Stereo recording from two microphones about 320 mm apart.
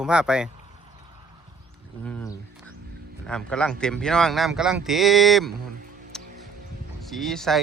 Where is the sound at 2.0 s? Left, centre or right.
Centre.